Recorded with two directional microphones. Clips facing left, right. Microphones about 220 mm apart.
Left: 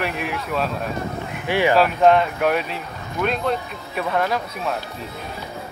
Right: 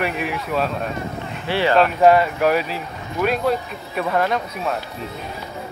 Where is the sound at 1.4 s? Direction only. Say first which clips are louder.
Even; 15° left (ahead or behind).